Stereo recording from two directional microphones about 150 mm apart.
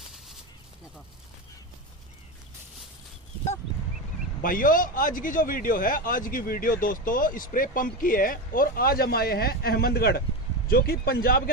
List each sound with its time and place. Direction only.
4.4 s a man's voice: 65° left (ahead or behind); by 11.5 s 85° left